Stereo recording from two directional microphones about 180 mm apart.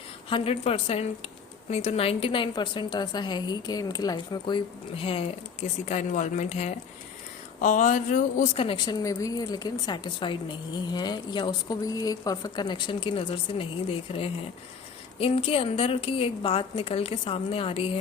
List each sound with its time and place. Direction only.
0.3 s a woman's voice: 30° left (ahead or behind)
8.6 s a woman's voice: 25° left (ahead or behind)